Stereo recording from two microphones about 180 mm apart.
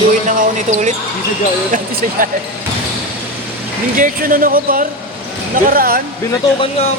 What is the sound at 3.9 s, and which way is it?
Speech, 50° right (ahead or behind).